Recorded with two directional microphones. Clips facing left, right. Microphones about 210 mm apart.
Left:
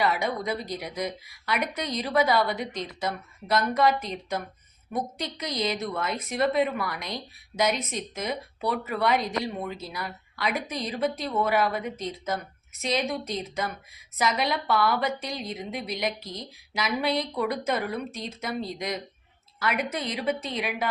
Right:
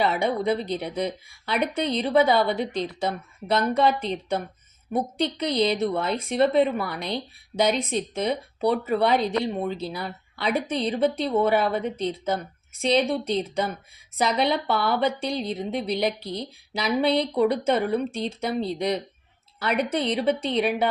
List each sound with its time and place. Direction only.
0.0 s speech: 30° right (ahead or behind)